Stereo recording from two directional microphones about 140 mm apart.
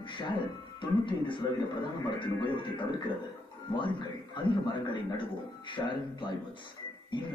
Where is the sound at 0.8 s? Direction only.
35° left (ahead or behind).